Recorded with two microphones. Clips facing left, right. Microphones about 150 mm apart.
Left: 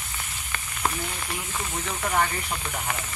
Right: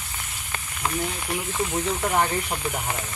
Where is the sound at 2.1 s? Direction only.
25° right (ahead or behind).